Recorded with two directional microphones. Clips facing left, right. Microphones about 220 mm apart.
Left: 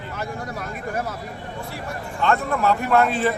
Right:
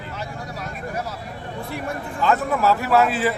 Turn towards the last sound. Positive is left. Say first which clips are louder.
# even
turn(degrees=-5)  # may be behind; listen again after turning